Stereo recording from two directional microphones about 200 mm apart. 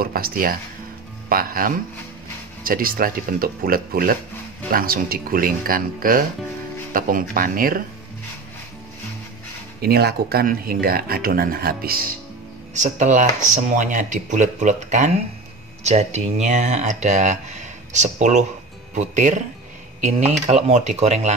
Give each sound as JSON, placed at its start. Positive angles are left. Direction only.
{"t": 0.0, "sound": "speech", "side_deg": -50}
{"t": 9.8, "sound": "speech", "side_deg": -50}
{"t": 12.7, "sound": "speech", "side_deg": -35}